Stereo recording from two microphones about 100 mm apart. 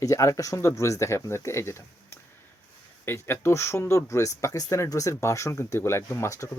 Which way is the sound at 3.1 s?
25° left (ahead or behind).